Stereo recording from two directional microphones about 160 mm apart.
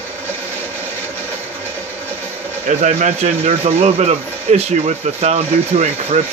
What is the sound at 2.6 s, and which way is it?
Speech, 50° right (ahead or behind).